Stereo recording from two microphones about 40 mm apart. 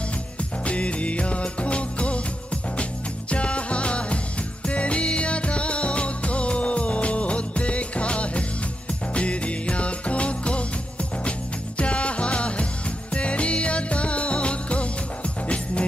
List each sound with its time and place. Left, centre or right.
0.4 s music: left